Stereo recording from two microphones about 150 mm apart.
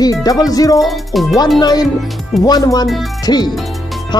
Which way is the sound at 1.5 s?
25° left (ahead or behind).